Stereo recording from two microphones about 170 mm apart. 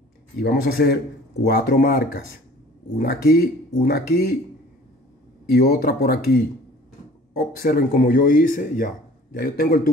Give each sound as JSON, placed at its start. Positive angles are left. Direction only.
{"t": 0.4, "sound": "speech", "side_deg": 70}
{"t": 5.5, "sound": "speech", "side_deg": 60}